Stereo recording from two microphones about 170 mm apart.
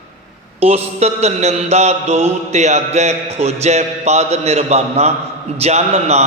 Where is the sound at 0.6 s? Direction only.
40° right (ahead or behind).